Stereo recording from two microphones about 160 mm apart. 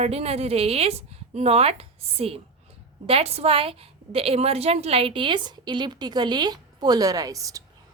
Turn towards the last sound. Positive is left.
turn(degrees=-20)  # may be behind; listen again after turning